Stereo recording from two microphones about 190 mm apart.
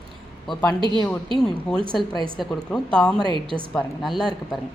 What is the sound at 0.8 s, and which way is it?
Speech, 25° right (ahead or behind).